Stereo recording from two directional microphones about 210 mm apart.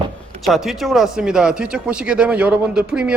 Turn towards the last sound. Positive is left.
turn(degrees=-5)  # may be behind; listen again after turning